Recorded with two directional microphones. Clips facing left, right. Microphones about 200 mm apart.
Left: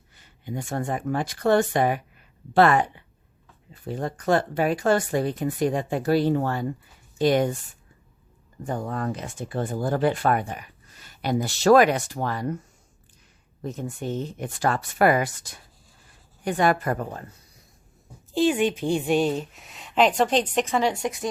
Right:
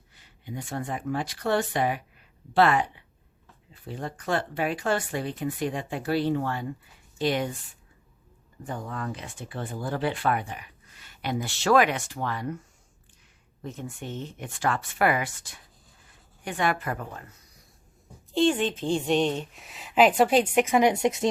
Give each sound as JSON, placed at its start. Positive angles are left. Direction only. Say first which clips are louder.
{"t": 0.2, "sound": "speech", "louder": "left 4 dB", "side_deg": 45}
{"t": 8.6, "sound": "speech", "louder": "left 5 dB", "side_deg": 45}
{"t": 18.3, "sound": "a woman's voice", "louder": "left 2 dB", "side_deg": 5}